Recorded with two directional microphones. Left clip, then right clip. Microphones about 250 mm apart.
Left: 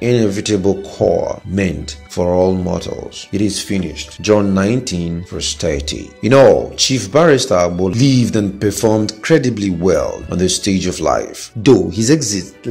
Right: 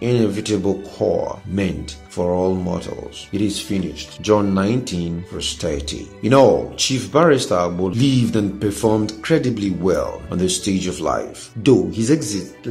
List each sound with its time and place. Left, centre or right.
0.0 s speech: centre